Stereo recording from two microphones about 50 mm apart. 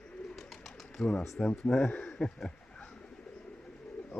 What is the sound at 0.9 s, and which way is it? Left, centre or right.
Speech, centre.